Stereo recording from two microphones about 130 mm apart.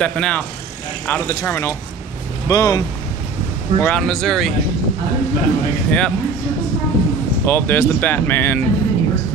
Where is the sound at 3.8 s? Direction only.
5° left (ahead or behind).